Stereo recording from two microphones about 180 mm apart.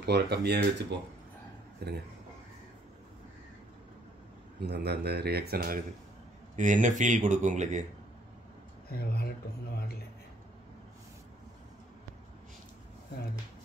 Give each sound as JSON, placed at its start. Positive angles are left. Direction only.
{"t": 0.0, "sound": "speech", "side_deg": -65}
{"t": 4.6, "sound": "speech", "side_deg": -65}
{"t": 6.5, "sound": "speech", "side_deg": -45}
{"t": 8.8, "sound": "speech", "side_deg": 60}